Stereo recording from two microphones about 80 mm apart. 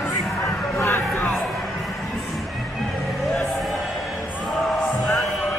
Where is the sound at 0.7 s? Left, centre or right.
Left.